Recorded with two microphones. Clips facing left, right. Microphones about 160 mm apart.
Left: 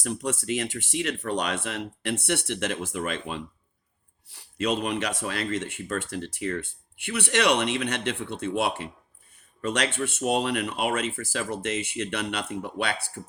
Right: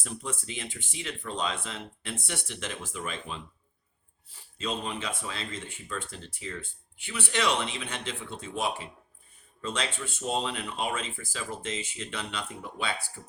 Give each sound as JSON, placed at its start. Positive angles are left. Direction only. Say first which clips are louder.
{"t": 0.0, "sound": "speech", "louder": "left 8 dB", "side_deg": 75}